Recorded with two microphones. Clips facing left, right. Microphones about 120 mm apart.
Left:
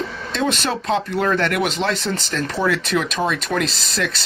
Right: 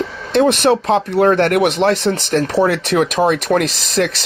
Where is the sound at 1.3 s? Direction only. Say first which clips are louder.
Right 6 dB; 55° right (ahead or behind).